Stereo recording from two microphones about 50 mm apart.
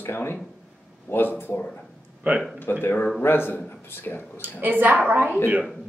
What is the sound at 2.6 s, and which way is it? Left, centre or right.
Speech, left.